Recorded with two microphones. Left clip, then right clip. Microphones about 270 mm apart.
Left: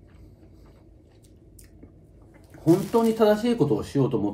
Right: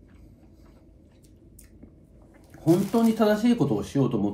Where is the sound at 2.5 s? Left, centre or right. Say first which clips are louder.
Left 1 dB; centre.